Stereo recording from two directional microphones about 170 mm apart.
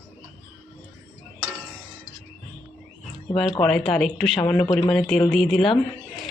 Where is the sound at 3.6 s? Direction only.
5° left (ahead or behind).